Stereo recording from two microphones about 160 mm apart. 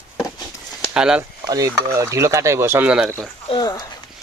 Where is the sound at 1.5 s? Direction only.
20° right (ahead or behind).